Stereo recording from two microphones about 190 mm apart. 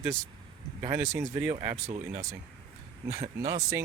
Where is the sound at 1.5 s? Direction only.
25° right (ahead or behind).